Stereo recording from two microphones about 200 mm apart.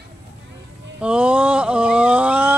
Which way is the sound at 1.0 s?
5° right (ahead or behind).